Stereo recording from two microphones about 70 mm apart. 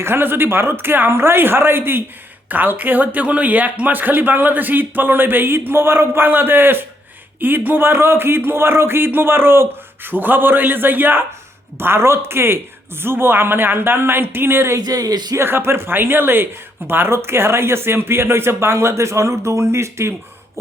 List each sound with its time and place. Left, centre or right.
0.0 s speech: right
14.8 s speech: right
15.4 s speech: right